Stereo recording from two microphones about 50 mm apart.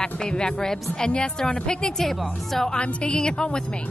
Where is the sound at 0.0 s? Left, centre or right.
Centre.